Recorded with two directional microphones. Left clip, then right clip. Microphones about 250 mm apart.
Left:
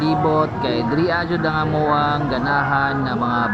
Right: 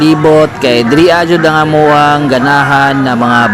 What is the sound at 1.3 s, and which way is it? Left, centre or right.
Speech, right.